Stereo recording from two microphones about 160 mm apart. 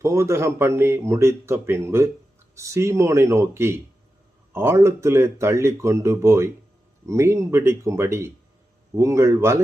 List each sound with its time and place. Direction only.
0.0 s speech: 20° right (ahead or behind)